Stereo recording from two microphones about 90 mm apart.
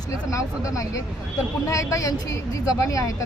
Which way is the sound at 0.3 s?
35° left (ahead or behind).